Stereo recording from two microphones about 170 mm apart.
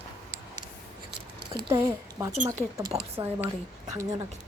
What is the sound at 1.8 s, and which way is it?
Speech, 10° right (ahead or behind).